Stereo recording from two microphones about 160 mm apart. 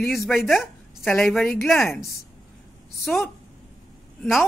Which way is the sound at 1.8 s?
15° left (ahead or behind).